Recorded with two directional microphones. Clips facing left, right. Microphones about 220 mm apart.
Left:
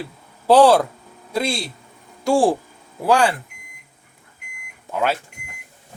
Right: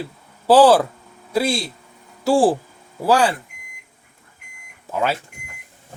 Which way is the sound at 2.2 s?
5° right (ahead or behind).